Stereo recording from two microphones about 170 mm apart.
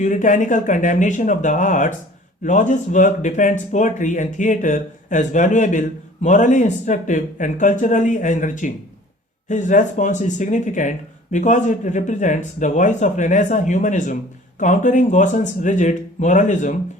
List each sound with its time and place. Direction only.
0.0 s speech: 50° left (ahead or behind)